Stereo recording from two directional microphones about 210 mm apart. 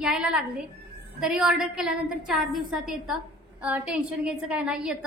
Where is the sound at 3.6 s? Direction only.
5° right (ahead or behind).